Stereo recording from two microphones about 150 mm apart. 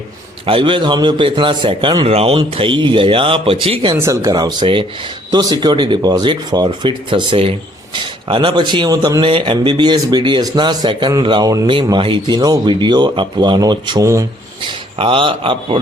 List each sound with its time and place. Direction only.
0.4 s a man's voice: 35° right (ahead or behind)
3.9 s a man's voice: 20° right (ahead or behind)
14.6 s a man's voice: 35° right (ahead or behind)